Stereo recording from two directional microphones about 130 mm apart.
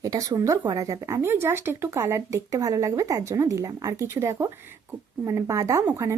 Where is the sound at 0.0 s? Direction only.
25° right (ahead or behind).